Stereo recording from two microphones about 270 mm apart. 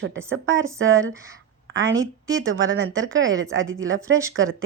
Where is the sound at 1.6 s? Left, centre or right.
Right.